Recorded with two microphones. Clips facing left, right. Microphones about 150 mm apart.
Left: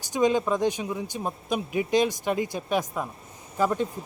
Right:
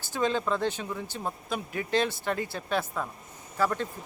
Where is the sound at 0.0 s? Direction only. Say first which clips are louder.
Left 5 dB; 15° left (ahead or behind).